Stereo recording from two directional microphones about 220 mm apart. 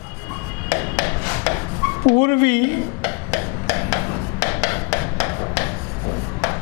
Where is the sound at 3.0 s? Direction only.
15° left (ahead or behind).